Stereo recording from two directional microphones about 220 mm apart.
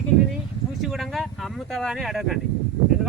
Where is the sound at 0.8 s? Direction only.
Centre (ahead or behind).